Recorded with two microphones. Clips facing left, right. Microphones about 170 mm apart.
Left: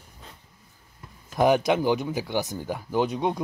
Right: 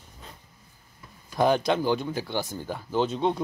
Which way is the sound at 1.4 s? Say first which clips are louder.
Left 2 dB; 15° left (ahead or behind).